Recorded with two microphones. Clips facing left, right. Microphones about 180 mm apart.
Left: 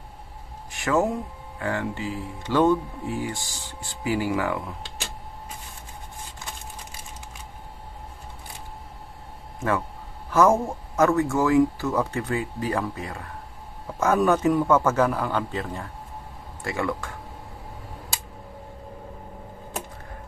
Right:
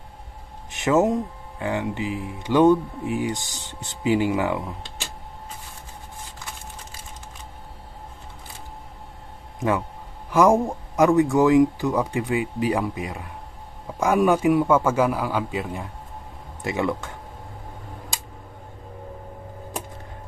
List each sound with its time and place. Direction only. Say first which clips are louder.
0.7 s speech: right 4 dB; 20° right (ahead or behind)
9.6 s speech: right 2 dB; 15° right (ahead or behind)